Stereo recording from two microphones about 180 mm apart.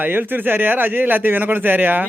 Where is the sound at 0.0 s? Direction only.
10° right (ahead or behind).